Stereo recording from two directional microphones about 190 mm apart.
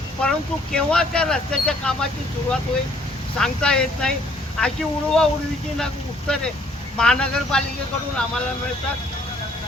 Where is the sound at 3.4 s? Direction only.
5° left (ahead or behind).